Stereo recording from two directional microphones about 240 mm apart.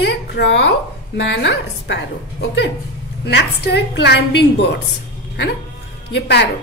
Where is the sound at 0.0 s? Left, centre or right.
Left.